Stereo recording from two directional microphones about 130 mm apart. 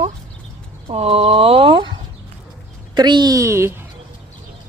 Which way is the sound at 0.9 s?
50° right (ahead or behind).